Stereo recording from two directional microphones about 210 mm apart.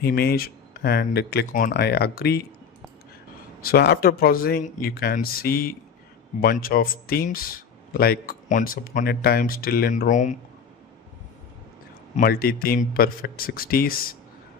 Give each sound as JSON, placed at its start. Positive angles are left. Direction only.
{"t": 0.0, "sound": "speech", "side_deg": 50}
{"t": 3.6, "sound": "speech", "side_deg": 50}
{"t": 12.1, "sound": "speech", "side_deg": 45}